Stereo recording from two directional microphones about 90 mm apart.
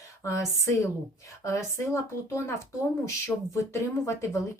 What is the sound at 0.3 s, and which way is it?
A woman's voice, 30° left (ahead or behind).